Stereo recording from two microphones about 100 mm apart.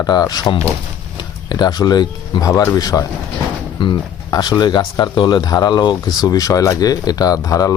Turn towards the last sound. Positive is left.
turn(degrees=35)  # may be behind; listen again after turning